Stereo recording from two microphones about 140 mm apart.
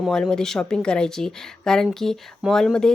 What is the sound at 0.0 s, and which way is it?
A woman's voice, 5° left (ahead or behind).